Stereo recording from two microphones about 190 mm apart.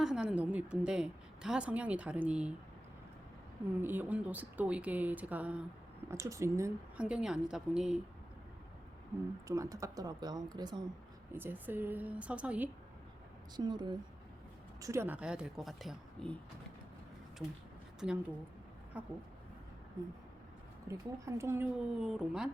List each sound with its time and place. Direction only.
0.0 s a woman's voice: 5° right (ahead or behind)
3.8 s a woman's voice: 10° right (ahead or behind)
9.5 s speech: 15° right (ahead or behind)
11.3 s speech: 10° right (ahead or behind)
13.6 s a woman's voice: 20° right (ahead or behind); by 16.3 s centre (ahead or behind)
18.0 s a woman's voice: 5° right (ahead or behind)
20.8 s speech: 15° right (ahead or behind)